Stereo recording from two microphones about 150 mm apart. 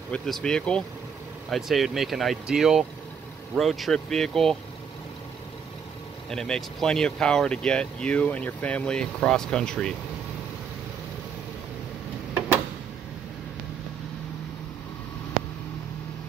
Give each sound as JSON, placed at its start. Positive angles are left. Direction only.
{"t": 0.1, "sound": "speech", "side_deg": 5}
{"t": 6.3, "sound": "speech", "side_deg": 5}